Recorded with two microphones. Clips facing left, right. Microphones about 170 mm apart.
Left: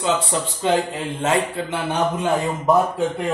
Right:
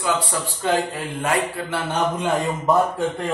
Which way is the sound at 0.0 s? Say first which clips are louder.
Left 2 dB; 25° left (ahead or behind).